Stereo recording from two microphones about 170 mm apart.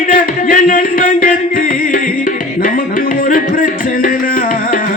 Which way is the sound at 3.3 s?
55° left (ahead or behind).